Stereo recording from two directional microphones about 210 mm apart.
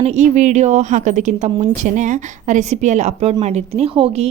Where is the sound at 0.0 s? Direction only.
35° right (ahead or behind).